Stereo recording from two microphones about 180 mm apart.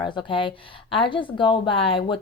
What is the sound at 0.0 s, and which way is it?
Speech, 25° left (ahead or behind).